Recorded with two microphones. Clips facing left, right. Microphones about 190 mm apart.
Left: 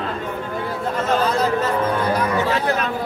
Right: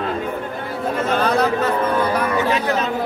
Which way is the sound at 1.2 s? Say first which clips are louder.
Right 2 dB; 60° right (ahead or behind).